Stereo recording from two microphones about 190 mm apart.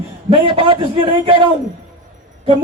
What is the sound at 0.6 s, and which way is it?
Speech, 30° right (ahead or behind).